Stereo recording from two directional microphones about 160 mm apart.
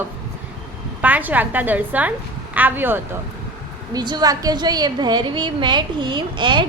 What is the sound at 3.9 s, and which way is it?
A woman's voice, 25° right (ahead or behind).